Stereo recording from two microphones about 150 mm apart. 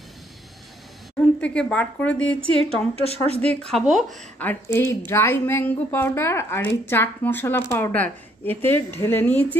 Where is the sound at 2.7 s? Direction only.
40° left (ahead or behind).